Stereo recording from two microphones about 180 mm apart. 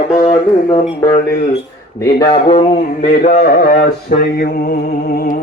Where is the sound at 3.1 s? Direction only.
55° left (ahead or behind).